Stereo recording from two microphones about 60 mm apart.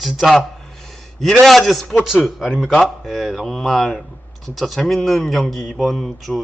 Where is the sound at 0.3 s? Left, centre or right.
Centre.